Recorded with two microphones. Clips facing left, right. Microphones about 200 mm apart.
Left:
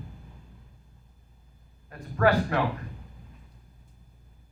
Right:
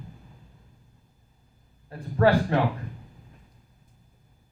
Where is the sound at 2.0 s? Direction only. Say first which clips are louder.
Right 2 dB; 30° right (ahead or behind).